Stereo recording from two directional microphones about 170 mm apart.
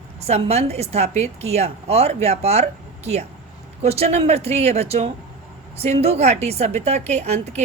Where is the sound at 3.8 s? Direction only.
35° right (ahead or behind).